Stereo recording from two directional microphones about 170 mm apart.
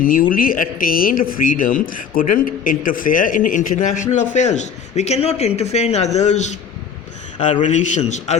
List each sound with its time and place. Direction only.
0.0 s speech: 55° left (ahead or behind)
7.6 s speech: 45° left (ahead or behind)